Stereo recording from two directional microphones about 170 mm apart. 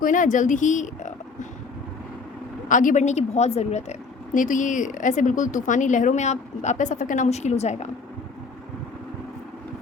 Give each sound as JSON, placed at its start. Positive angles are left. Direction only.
{"t": 0.0, "sound": "speech", "side_deg": 50}
{"t": 2.6, "sound": "a woman's voice", "side_deg": 50}